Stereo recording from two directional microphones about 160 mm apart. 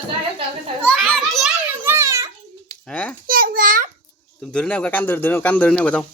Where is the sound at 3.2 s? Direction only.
60° right (ahead or behind).